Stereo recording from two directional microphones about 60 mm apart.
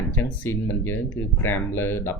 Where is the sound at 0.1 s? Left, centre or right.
Left.